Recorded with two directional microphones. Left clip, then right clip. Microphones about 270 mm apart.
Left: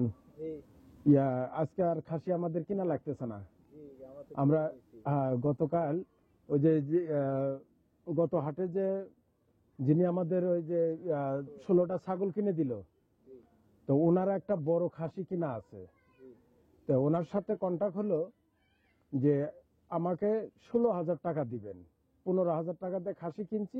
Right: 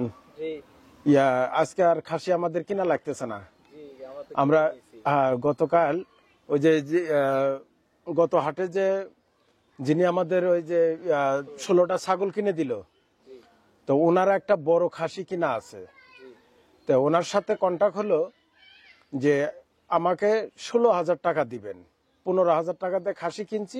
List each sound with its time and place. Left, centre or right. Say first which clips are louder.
1.0 s a man's voice: right 8 dB; centre
14.0 s a man's voice: right 11 dB; centre
14.6 s speech: right 9 dB; right
15.2 s a man's voice: right 10 dB; centre